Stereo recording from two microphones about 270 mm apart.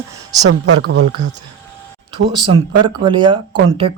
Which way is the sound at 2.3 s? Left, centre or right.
Centre.